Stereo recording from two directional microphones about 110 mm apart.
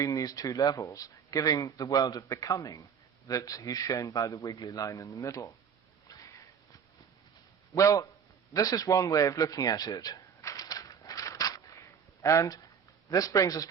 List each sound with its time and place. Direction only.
0.0 s speech: 30° left (ahead or behind)
6.1 s sniff: 35° left (ahead or behind)
7.8 s speech: 30° left (ahead or behind)
8.5 s a sound: 35° left (ahead or behind)
12.2 s speech: 30° left (ahead or behind)